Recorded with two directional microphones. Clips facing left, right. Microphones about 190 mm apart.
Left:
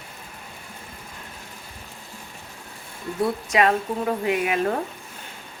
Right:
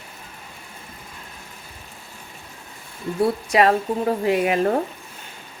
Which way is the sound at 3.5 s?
35° right (ahead or behind).